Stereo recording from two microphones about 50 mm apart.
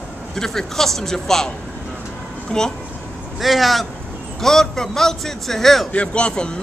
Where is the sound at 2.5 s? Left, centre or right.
Left.